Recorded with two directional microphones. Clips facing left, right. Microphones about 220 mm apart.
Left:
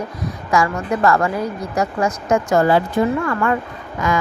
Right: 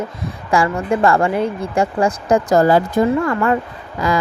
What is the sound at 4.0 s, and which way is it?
Speech, 35° right (ahead or behind).